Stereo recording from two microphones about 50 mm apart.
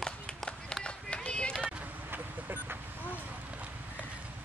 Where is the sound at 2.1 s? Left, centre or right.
Right.